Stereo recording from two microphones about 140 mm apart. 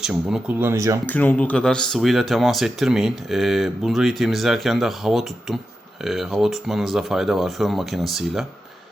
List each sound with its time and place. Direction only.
0.0 s speech: 5° right (ahead or behind)
0.6 s speech: 20° right (ahead or behind)
1.0 s speech: 10° left (ahead or behind)